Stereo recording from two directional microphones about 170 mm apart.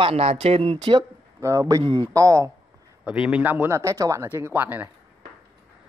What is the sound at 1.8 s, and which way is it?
Speech, 30° right (ahead or behind).